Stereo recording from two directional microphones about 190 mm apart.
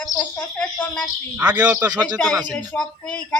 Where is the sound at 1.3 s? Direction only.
5° right (ahead or behind).